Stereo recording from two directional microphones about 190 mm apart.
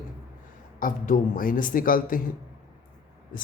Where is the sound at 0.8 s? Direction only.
45° left (ahead or behind).